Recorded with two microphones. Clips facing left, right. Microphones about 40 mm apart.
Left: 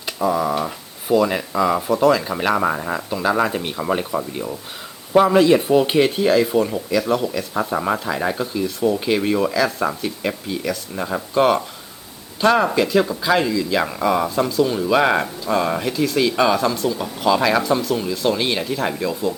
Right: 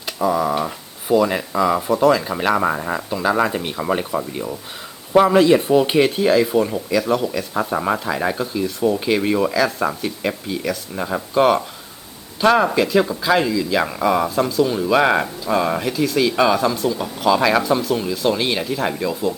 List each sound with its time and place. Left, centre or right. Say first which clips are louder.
0.2 s speech: right 1 dB; centre